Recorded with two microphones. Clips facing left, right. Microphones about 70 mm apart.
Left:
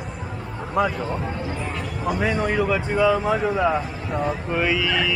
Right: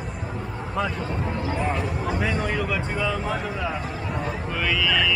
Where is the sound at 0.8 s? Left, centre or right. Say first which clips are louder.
Left 5 dB; centre.